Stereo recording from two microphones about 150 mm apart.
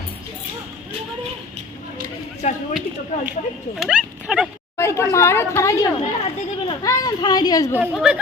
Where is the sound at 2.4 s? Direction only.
50° left (ahead or behind).